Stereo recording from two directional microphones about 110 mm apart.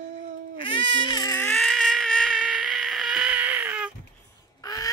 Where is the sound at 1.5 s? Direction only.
Centre (ahead or behind).